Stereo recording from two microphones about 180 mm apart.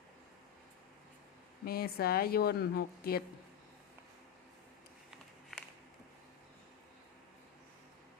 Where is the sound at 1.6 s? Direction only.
60° left (ahead or behind).